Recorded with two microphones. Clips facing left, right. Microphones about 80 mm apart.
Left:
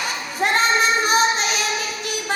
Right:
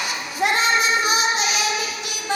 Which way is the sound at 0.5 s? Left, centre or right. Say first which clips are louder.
Left 3 dB; left.